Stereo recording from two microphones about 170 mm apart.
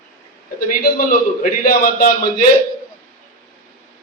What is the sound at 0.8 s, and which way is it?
A man's voice, 55° left (ahead or behind).